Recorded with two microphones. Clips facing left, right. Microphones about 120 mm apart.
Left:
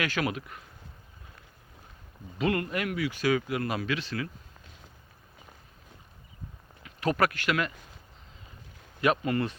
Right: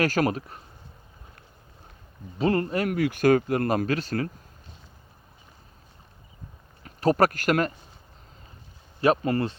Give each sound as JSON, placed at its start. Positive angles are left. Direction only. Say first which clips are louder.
{"t": 0.0, "sound": "speech", "louder": "right 7 dB", "side_deg": -40}
{"t": 2.4, "sound": "speech", "louder": "right 5 dB", "side_deg": -35}
{"t": 2.9, "sound": "speech", "louder": "right 7 dB", "side_deg": -50}
{"t": 6.8, "sound": "speech", "louder": "right 5 dB", "side_deg": -40}
{"t": 9.0, "sound": "speech", "louder": "right 4 dB", "side_deg": -35}